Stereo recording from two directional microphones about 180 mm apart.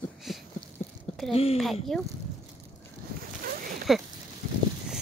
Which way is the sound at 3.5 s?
50° right (ahead or behind).